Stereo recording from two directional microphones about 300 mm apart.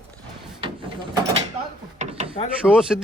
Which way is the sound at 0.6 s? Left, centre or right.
Centre.